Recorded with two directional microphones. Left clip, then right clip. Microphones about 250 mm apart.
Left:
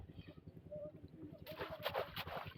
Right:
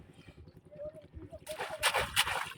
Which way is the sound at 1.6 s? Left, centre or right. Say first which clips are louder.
Right 11 dB; centre.